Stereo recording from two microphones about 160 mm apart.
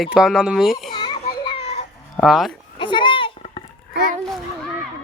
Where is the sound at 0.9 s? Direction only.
30° left (ahead or behind).